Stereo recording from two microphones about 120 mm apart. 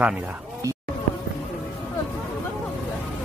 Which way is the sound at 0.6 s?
25° right (ahead or behind).